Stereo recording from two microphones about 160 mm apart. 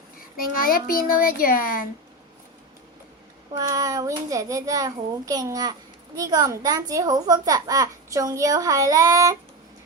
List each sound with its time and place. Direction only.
0.3 s a child's voice: 65° left (ahead or behind)
3.6 s a child's voice: 20° right (ahead or behind)